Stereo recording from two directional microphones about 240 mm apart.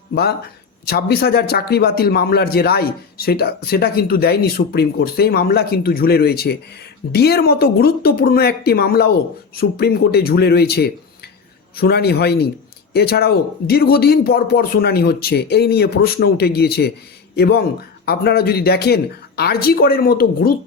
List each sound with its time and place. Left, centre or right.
0.1 s a man's voice: left